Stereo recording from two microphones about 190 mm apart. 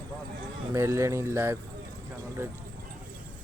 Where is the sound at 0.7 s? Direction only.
15° right (ahead or behind).